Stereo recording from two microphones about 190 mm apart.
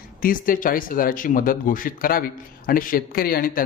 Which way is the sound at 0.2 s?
45° left (ahead or behind).